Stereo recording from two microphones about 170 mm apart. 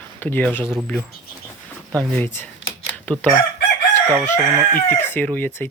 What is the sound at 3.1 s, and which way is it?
Crowing, 10° left (ahead or behind).